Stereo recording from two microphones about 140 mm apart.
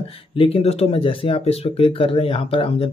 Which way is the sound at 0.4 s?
45° left (ahead or behind).